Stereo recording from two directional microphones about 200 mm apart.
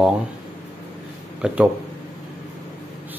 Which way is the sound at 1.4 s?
5° right (ahead or behind).